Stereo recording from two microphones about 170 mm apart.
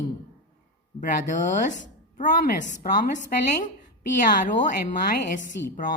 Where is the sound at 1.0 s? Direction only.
50° left (ahead or behind).